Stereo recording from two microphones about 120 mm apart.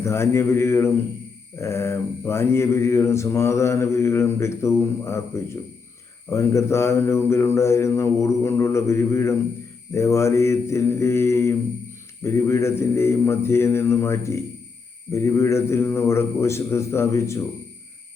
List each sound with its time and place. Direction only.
0.0 s mantra: 20° left (ahead or behind)